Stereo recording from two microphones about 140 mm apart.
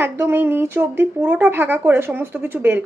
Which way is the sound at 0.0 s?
15° right (ahead or behind).